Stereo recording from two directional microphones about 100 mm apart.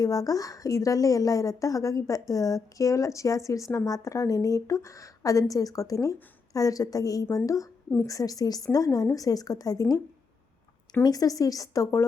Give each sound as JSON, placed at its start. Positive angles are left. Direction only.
{"t": 0.0, "sound": "a woman's voice", "side_deg": 35}
{"t": 11.0, "sound": "a woman's voice", "side_deg": 40}